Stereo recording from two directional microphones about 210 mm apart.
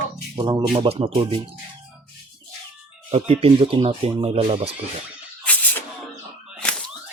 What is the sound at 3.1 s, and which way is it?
Speech, 25° right (ahead or behind).